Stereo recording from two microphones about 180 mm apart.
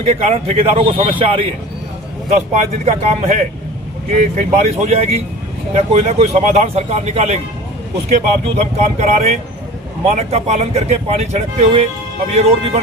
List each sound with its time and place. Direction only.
0.0 s speech: 35° right (ahead or behind)
2.5 s speech: 40° right (ahead or behind)